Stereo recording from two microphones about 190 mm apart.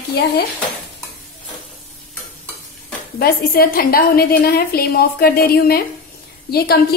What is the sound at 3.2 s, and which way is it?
A woman's voice, 55° left (ahead or behind).